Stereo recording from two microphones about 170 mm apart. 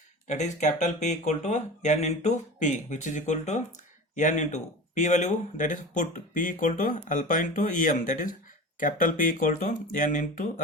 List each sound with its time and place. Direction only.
0.3 s speech: 45° left (ahead or behind)